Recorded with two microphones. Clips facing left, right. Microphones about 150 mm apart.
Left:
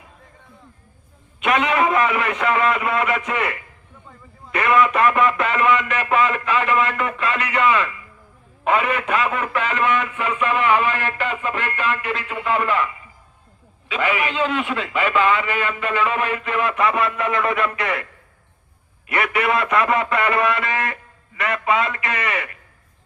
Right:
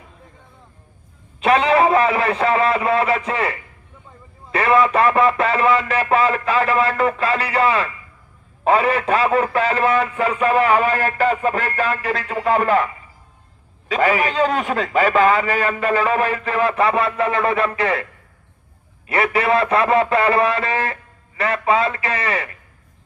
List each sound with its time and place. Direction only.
1.4 s speech: 30° right (ahead or behind)
19.0 s speech: 30° right (ahead or behind)